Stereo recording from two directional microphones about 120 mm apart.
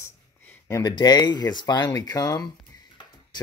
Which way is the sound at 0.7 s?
25° left (ahead or behind).